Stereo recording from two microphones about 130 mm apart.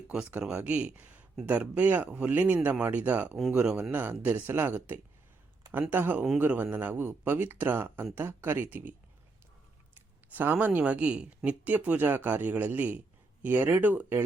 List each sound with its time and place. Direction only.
0.1 s speech: 10° right (ahead or behind)
10.3 s speech: 15° right (ahead or behind)